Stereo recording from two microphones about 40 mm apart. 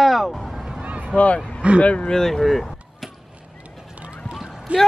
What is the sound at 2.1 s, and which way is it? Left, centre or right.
Speech, centre.